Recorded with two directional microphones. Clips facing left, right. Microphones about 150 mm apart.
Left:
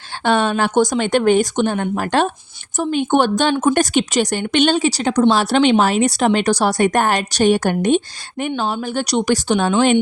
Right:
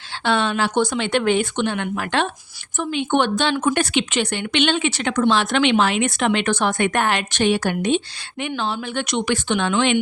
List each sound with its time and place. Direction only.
0.3 s speech: 45° left (ahead or behind)